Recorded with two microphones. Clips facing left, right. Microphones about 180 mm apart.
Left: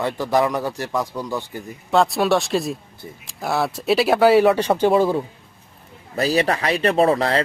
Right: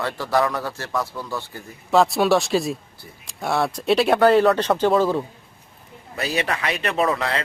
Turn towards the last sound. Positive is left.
turn(degrees=35)  # may be behind; listen again after turning